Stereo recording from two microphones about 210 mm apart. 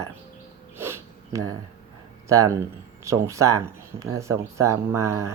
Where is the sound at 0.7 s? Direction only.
10° right (ahead or behind).